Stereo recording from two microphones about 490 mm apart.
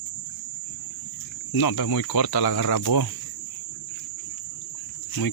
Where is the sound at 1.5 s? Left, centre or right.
Left.